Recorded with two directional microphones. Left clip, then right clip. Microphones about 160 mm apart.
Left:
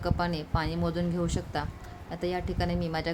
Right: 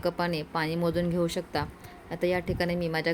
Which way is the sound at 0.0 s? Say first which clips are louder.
Right 2 dB; 25° right (ahead or behind).